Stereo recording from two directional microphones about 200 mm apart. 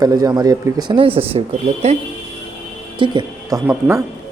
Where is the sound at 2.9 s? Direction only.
25° right (ahead or behind).